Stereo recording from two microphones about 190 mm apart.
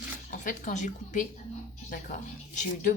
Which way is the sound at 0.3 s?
45° left (ahead or behind).